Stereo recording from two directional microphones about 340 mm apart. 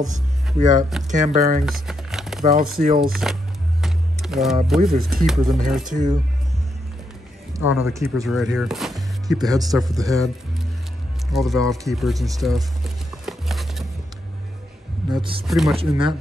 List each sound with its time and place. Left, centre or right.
0.0 s speech: centre
1.0 s speech: right
1.7 s speech: centre
3.8 s music: centre
4.6 s speech: centre
5.9 s speech: right
7.7 s speech: centre
11.3 s a sound: centre
15.0 s speech: centre
15.4 s speech: centre
15.7 s speech: centre